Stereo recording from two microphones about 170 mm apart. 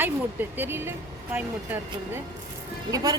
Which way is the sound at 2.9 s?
20° right (ahead or behind).